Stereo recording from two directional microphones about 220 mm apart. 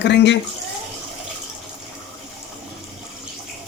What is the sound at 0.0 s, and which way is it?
Speech, 50° left (ahead or behind).